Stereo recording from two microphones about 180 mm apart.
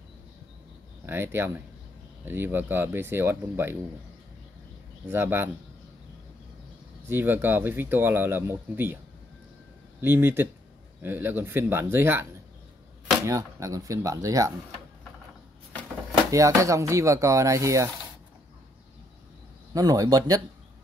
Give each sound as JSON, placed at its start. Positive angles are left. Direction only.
{"t": 1.0, "sound": "speech", "side_deg": -10}
{"t": 5.1, "sound": "speech", "side_deg": -10}
{"t": 7.1, "sound": "speech", "side_deg": -10}
{"t": 10.0, "sound": "speech", "side_deg": -10}
{"t": 16.3, "sound": "speech", "side_deg": -15}
{"t": 19.7, "sound": "speech", "side_deg": -20}